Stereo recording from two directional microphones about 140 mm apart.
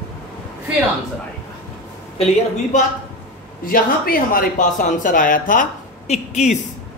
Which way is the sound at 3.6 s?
90° left.